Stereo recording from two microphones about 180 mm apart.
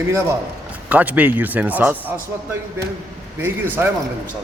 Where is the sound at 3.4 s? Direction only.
10° right (ahead or behind).